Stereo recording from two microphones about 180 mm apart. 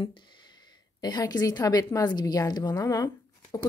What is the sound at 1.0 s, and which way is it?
A woman's voice, 20° left (ahead or behind).